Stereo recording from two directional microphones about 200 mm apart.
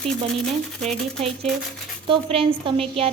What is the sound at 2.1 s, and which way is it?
A woman's voice, 30° right (ahead or behind).